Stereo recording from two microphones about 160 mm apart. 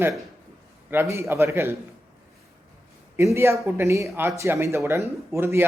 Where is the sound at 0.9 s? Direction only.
15° right (ahead or behind).